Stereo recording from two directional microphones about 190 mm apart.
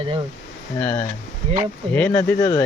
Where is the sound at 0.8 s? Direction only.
10° left (ahead or behind).